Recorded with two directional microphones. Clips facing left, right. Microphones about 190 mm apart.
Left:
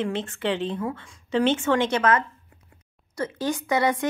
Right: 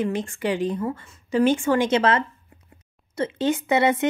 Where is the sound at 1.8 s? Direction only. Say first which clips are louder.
Right 2 dB; 25° right (ahead or behind).